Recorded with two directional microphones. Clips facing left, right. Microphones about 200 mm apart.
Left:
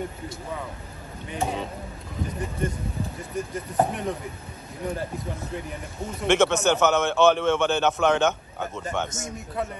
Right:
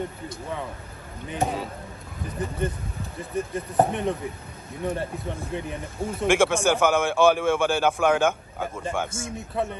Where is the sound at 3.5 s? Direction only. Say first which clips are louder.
Right 2 dB; 30° right (ahead or behind).